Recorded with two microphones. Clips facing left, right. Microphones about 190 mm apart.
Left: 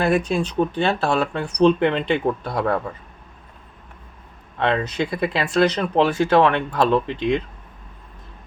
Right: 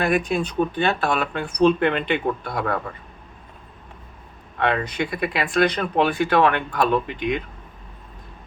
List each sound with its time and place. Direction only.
0.0 s speech: 30° left (ahead or behind)
4.6 s speech: 25° left (ahead or behind)